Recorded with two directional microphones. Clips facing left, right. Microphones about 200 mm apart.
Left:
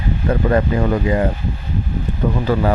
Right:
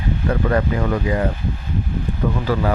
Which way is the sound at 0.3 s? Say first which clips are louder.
Left 3 dB; 25° left (ahead or behind).